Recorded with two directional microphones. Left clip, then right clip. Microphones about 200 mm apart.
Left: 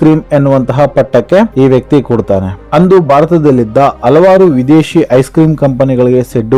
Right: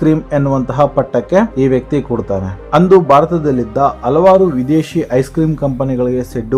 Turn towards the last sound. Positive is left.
turn(degrees=30)  # may be behind; listen again after turning